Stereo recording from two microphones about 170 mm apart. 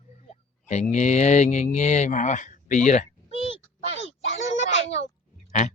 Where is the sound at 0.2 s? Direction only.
40° left (ahead or behind).